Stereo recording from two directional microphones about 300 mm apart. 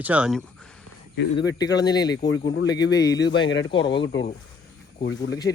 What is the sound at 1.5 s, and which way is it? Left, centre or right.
Speech, centre.